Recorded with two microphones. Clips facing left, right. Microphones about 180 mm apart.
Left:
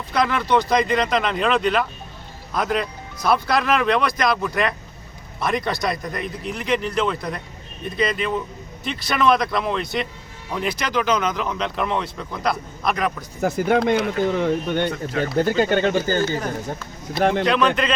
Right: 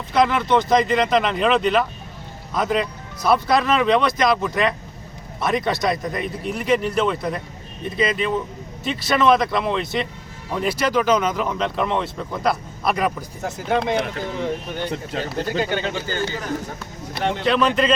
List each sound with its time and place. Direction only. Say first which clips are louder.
0.1 s speech: right 2 dB; centre (ahead or behind)
14.3 s speech: left 5 dB; 65° left (ahead or behind)
15.2 s speech: left 6 dB; 50° left (ahead or behind)
17.2 s speech: left 5 dB; 50° left (ahead or behind)
17.4 s speech: even; 5° right (ahead or behind)